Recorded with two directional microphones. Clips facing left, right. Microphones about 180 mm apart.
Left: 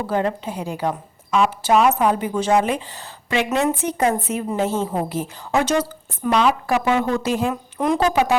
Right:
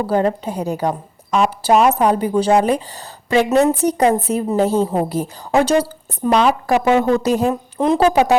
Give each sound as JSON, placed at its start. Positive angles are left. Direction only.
{"t": 0.1, "sound": "a woman's voice", "side_deg": -40}
{"t": 7.8, "sound": "a woman's voice", "side_deg": -30}